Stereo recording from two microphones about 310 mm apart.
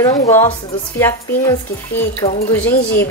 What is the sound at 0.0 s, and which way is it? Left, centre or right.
A woman's voice, centre.